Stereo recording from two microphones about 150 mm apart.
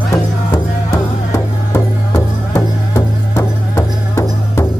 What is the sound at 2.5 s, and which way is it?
Music, 20° left (ahead or behind).